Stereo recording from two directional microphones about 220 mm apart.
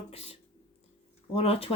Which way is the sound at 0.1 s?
30° left (ahead or behind).